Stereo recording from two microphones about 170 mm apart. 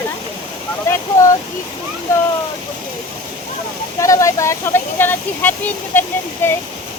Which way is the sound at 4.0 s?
20° left (ahead or behind).